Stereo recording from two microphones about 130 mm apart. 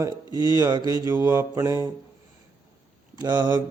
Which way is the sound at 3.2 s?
30° right (ahead or behind).